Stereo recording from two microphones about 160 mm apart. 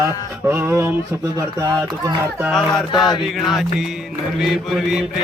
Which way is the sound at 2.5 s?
Centre (ahead or behind).